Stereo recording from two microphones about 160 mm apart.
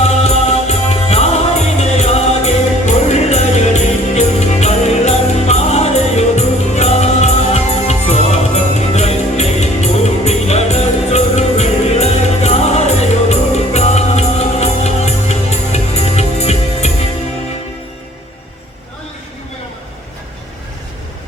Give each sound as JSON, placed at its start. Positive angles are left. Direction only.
{"t": 0.0, "sound": "music", "side_deg": 40}